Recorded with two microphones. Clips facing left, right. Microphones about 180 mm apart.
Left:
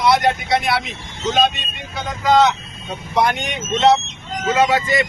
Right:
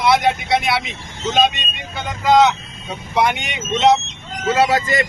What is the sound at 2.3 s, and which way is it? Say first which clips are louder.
Speech: right 1 dB; centre (ahead or behind).